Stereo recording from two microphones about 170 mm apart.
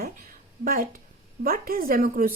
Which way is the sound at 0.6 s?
55° right (ahead or behind).